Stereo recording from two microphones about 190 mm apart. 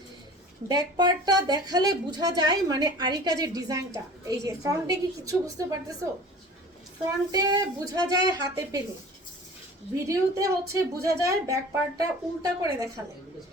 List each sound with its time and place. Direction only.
0.7 s speech: 20° right (ahead or behind)
7.3 s speech: 20° right (ahead or behind)
9.9 s a woman's voice: 15° right (ahead or behind)